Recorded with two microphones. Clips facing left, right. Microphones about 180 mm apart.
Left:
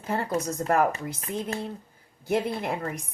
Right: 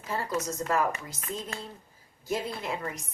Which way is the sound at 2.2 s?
60° left (ahead or behind).